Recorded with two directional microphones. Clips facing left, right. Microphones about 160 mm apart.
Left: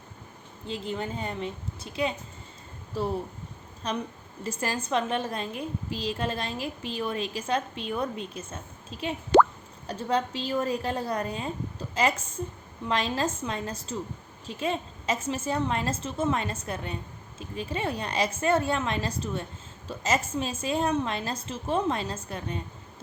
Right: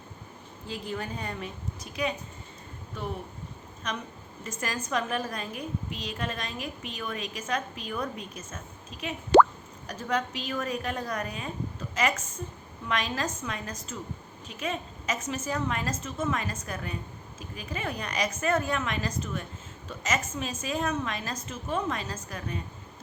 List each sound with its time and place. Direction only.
0.7 s a woman's voice: 25° left (ahead or behind)